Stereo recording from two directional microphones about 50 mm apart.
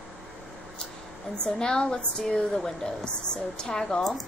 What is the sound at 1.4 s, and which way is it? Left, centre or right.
A woman's voice, centre.